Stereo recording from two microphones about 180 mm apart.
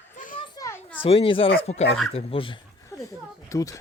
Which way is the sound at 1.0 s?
30° left (ahead or behind).